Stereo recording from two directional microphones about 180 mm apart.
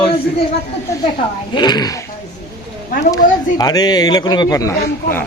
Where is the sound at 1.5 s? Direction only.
25° left (ahead or behind).